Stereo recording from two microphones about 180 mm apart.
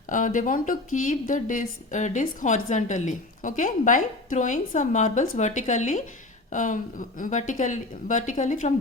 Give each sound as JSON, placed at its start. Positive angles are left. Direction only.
{"t": 0.1, "sound": "a woman's voice", "side_deg": 45}